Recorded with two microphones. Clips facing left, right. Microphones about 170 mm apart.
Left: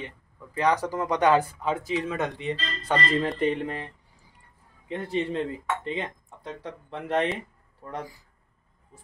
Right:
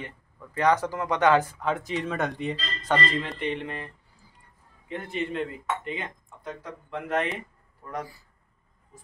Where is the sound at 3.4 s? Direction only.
40° left (ahead or behind).